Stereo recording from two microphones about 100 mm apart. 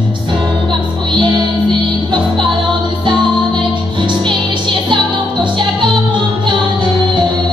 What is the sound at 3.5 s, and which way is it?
Music, 50° right (ahead or behind).